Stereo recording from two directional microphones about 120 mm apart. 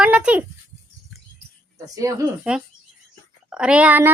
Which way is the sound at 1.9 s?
25° right (ahead or behind).